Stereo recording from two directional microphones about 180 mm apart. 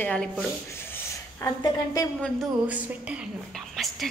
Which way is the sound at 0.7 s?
10° left (ahead or behind).